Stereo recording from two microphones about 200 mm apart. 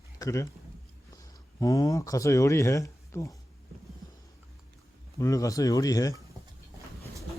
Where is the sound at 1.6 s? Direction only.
20° left (ahead or behind).